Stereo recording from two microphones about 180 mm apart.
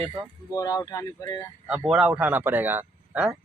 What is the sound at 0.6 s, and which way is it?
Speech, 20° left (ahead or behind).